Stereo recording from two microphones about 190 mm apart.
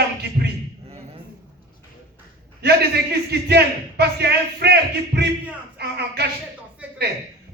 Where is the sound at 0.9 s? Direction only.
30° right (ahead or behind).